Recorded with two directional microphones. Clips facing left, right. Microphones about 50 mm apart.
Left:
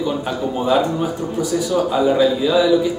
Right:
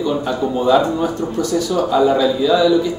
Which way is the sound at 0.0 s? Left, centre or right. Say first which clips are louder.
Right 2 dB; centre.